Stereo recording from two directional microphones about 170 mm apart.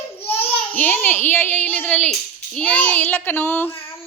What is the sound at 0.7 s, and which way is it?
A child's voice, 10° left (ahead or behind).